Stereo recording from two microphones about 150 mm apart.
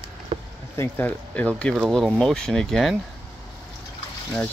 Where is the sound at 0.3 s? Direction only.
40° right (ahead or behind).